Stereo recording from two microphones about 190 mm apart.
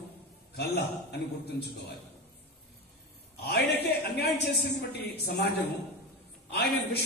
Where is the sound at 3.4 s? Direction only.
60° left (ahead or behind).